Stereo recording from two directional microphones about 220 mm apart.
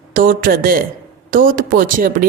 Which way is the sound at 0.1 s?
40° right (ahead or behind).